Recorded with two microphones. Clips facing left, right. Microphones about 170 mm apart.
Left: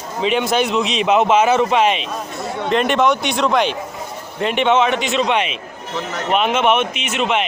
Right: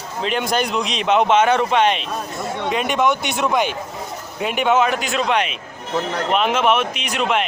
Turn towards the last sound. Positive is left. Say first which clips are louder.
# left 1 dB
turn(degrees=0)  # may be behind; listen again after turning